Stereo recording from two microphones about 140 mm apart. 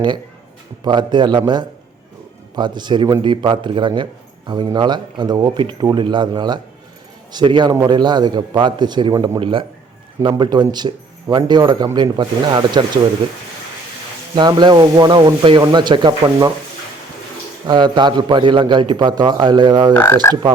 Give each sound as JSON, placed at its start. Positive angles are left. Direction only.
{"t": 0.9, "sound": "a man's voice", "side_deg": -30}
{"t": 14.3, "sound": "a man's voice", "side_deg": -30}
{"t": 17.7, "sound": "a man's voice", "side_deg": -35}
{"t": 20.2, "sound": "frog", "side_deg": 20}